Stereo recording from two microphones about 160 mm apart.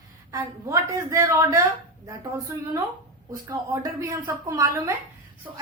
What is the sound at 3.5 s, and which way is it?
Speech, 20° right (ahead or behind).